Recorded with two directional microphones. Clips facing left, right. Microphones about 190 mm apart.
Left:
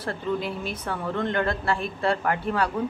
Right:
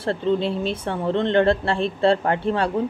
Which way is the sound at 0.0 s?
30° right (ahead or behind).